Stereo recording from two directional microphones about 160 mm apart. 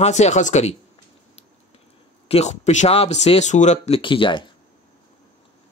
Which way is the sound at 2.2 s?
40° left (ahead or behind).